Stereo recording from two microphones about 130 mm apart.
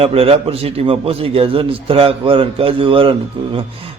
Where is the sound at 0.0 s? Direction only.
50° right (ahead or behind).